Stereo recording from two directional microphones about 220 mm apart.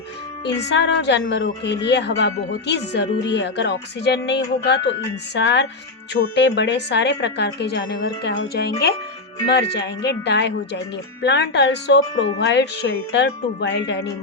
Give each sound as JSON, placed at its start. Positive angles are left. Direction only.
{"t": 0.7, "sound": "speech", "side_deg": 50}